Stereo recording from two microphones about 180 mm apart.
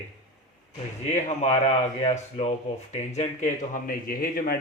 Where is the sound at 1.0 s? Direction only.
40° left (ahead or behind).